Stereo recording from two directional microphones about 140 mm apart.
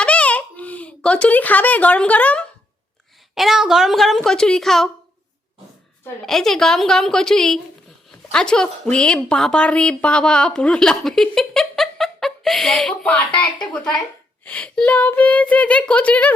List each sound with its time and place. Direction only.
0.0 s a sound: 10° left (ahead or behind)
3.3 s speech: centre (ahead or behind)
6.2 s a woman's voice: centre (ahead or behind)